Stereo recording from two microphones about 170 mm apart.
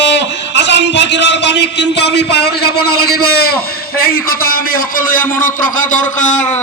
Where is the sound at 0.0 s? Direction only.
90° left; by 6.5 s 45° left (ahead or behind).